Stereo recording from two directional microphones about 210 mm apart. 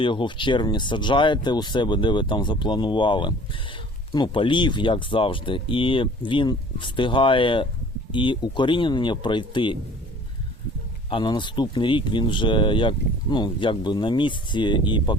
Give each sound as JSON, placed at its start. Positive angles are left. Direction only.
{"t": 0.0, "sound": "speech", "side_deg": 25}
{"t": 11.1, "sound": "speech", "side_deg": 20}